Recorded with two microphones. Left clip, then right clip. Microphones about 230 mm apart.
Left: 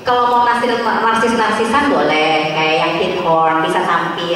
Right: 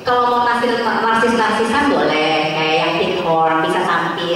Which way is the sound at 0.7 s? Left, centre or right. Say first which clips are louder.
Left 1 dB; centre.